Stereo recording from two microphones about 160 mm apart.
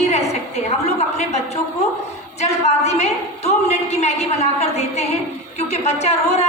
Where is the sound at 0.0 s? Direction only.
45° left (ahead or behind).